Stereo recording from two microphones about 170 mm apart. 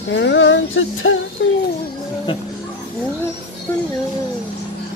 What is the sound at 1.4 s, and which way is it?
Speech, 90° left.